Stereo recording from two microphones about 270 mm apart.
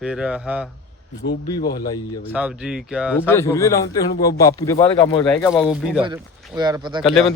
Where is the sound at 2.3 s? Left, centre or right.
Centre.